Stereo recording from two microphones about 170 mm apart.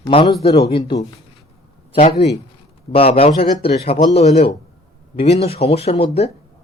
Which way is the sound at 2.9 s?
35° left (ahead or behind).